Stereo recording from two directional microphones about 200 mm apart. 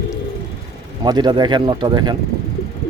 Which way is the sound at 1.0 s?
20° right (ahead or behind).